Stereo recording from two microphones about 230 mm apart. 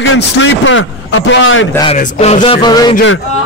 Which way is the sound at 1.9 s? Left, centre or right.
Left.